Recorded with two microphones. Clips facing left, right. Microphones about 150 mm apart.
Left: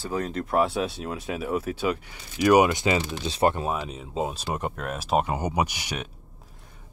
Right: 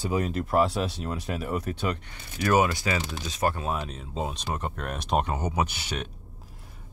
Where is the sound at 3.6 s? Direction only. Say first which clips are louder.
Left 2 dB; 10° left (ahead or behind).